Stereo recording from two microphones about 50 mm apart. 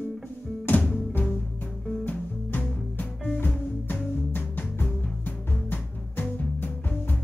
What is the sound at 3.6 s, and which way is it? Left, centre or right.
Music, left.